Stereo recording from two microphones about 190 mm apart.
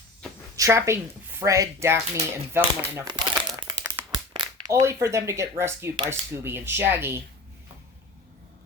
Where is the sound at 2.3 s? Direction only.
15° right (ahead or behind).